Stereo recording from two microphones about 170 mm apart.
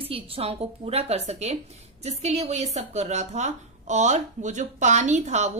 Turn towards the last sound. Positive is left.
turn(degrees=-40)  # may be behind; listen again after turning